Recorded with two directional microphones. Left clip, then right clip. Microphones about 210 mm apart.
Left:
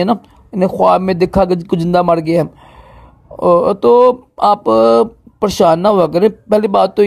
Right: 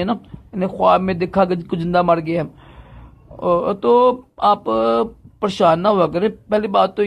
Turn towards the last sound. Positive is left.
turn(degrees=45)  # may be behind; listen again after turning